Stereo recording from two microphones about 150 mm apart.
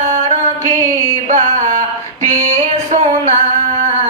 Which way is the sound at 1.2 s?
55° right (ahead or behind).